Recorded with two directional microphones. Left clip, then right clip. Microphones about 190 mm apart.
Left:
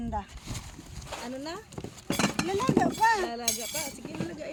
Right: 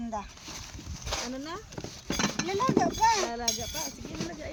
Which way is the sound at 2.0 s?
45° left (ahead or behind).